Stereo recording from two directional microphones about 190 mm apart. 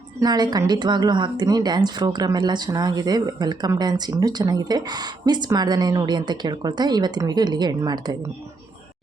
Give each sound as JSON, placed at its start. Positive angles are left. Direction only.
{"t": 0.2, "sound": "speech", "side_deg": -20}